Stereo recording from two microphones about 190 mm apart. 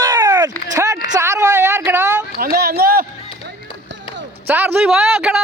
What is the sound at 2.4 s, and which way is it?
Speech, 55° right (ahead or behind).